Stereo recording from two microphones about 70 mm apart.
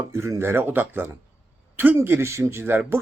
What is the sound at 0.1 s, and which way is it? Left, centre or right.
Speech, right.